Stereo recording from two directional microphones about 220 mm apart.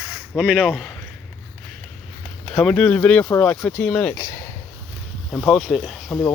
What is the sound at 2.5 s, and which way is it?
Speech, 5° left (ahead or behind).